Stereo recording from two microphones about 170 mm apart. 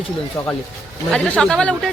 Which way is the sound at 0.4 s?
15° left (ahead or behind).